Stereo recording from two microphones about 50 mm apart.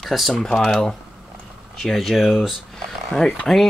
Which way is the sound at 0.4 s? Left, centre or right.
Centre.